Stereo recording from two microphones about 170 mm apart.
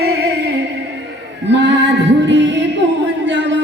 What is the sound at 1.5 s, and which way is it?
Female singing, 90° right.